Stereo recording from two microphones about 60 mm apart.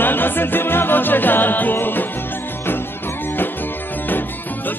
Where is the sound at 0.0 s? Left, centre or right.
Left.